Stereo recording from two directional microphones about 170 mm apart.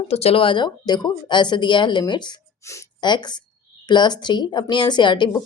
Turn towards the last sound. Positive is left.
turn(degrees=25)  # may be behind; listen again after turning